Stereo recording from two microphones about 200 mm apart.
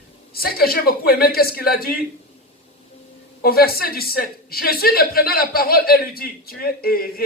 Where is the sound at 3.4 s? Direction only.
50° left (ahead or behind).